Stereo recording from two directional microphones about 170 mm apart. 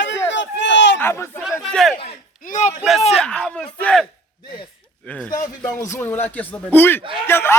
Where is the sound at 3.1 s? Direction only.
5° left (ahead or behind).